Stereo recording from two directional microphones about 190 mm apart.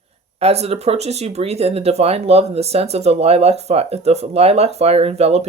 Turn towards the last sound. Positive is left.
turn(degrees=-35)  # may be behind; listen again after turning